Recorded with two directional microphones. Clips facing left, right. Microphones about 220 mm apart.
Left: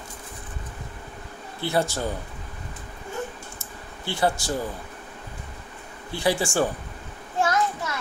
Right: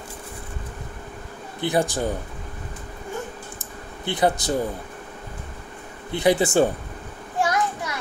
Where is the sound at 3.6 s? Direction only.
20° right (ahead or behind).